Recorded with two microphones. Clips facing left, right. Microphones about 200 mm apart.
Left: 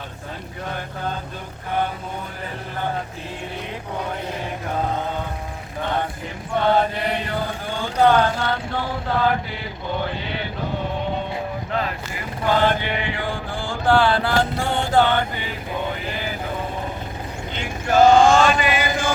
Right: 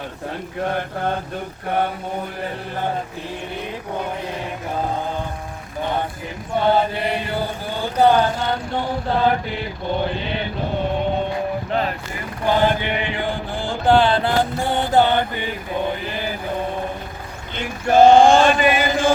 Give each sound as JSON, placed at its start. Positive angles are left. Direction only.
{"t": 6.6, "sound": "chant", "side_deg": -5}
{"t": 7.7, "sound": "a sound", "side_deg": -10}
{"t": 12.5, "sound": "mantra", "side_deg": -15}
{"t": 18.0, "sound": "chant", "side_deg": -30}